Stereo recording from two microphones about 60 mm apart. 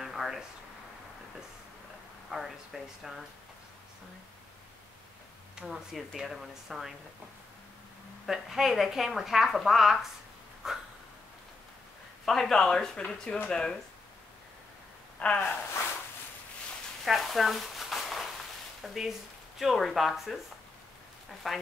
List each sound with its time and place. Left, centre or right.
0.0 s a sound: centre
2.3 s speech: centre
5.9 s speech: centre
8.3 s speech: centre
10.6 s a sound: centre
12.3 s speech: centre
15.1 s gasp: centre
17.0 s a sound: centre
18.8 s speech: centre
21.4 s speech: centre